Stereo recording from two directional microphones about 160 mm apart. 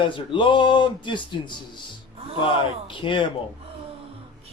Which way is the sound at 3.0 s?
30° left (ahead or behind).